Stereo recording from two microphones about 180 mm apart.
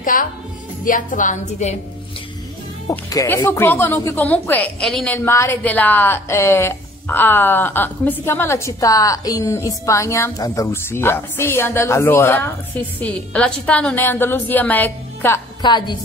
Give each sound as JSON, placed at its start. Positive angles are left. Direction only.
{"t": 0.0, "sound": "a woman's voice", "side_deg": 50}
{"t": 2.9, "sound": "speech", "side_deg": 20}
{"t": 15.6, "sound": "a woman's voice", "side_deg": 25}